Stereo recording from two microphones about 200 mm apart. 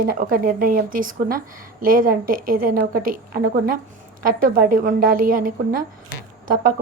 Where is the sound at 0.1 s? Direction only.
45° right (ahead or behind).